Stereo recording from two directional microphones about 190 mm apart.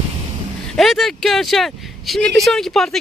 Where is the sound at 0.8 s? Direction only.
Centre (ahead or behind).